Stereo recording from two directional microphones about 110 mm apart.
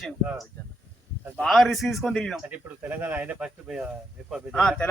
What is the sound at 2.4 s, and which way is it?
Speech, 15° right (ahead or behind).